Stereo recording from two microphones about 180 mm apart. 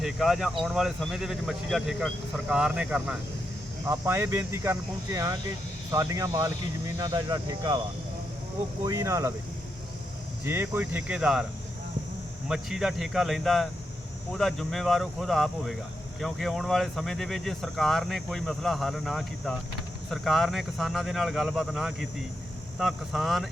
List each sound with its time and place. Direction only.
0.0 s speech: centre (ahead or behind); by 7.8 s 25° right (ahead or behind)
8.8 s speech: 20° right (ahead or behind)
10.4 s speech: 10° right (ahead or behind)
12.5 s speech: 5° right (ahead or behind)